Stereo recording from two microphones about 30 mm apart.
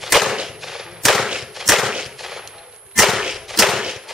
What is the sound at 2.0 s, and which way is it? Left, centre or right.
Gunshot, centre.